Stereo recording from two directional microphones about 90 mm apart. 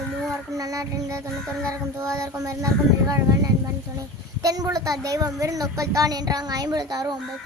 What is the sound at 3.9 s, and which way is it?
Speech, 40° right (ahead or behind).